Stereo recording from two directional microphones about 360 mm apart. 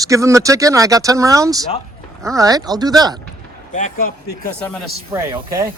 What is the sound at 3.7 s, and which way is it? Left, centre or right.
Speech, left.